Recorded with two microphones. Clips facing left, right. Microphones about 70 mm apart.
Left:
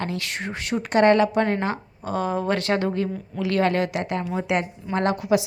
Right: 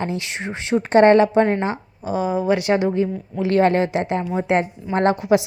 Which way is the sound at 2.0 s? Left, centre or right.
Centre.